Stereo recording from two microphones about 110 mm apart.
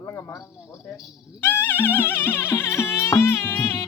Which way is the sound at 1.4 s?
20° left (ahead or behind).